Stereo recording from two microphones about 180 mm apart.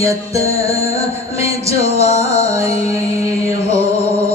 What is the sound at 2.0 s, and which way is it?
Music, 35° left (ahead or behind).